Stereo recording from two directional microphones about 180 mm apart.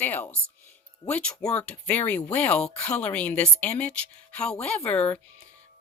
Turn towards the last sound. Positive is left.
turn(degrees=10)  # may be behind; listen again after turning